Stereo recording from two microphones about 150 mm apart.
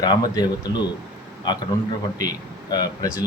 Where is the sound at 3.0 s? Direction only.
25° left (ahead or behind).